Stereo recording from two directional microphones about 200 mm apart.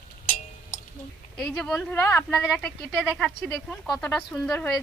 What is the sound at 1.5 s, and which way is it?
Speech, 5° left (ahead or behind).